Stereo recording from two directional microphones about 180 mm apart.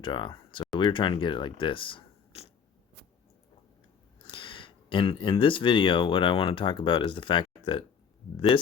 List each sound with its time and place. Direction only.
0.0 s speech: 25° left (ahead or behind)
4.3 s speech: 30° left (ahead or behind)